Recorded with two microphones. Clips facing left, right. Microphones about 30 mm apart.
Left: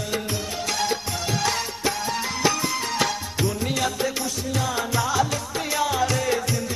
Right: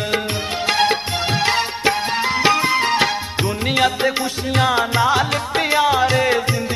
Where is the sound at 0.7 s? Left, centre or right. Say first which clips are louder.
Right 9 dB; right.